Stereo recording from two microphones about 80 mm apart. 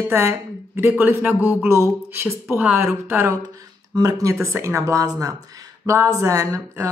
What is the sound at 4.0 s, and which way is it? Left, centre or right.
Speech, right.